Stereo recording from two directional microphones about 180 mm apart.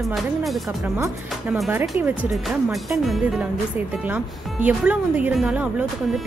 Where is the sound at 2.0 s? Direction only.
5° right (ahead or behind).